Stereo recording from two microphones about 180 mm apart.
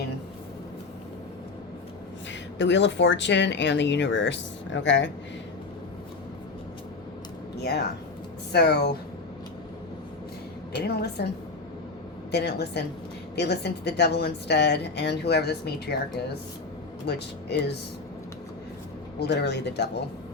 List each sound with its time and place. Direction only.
2.6 s speech: 80° left
7.6 s speech: 65° left (ahead or behind)
10.8 s speech: 65° left (ahead or behind)
12.3 s speech: 65° left (ahead or behind)
17.1 s speech: 65° left (ahead or behind)
19.2 s speech: 70° left (ahead or behind)